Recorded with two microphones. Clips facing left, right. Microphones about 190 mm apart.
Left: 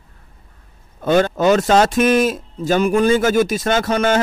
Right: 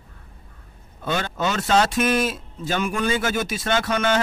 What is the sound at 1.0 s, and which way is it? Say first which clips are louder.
Speech: left 10 dB; 45° left (ahead or behind).